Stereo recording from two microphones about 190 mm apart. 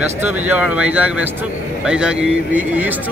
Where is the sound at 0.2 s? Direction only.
10° right (ahead or behind).